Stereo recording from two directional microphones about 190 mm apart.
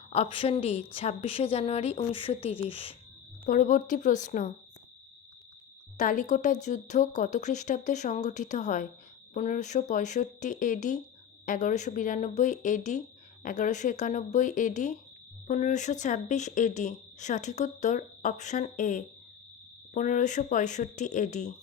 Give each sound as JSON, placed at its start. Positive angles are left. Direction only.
{"t": 0.1, "sound": "speech", "side_deg": 30}
{"t": 3.4, "sound": "speech", "side_deg": 45}
{"t": 6.0, "sound": "speech", "side_deg": 45}